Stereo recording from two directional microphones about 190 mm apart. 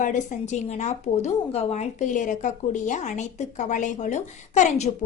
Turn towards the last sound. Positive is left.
turn(degrees=35)  # may be behind; listen again after turning